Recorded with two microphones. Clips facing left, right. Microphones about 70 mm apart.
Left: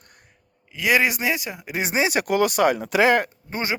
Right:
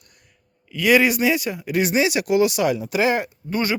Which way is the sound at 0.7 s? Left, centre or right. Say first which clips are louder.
Right 4 dB; centre.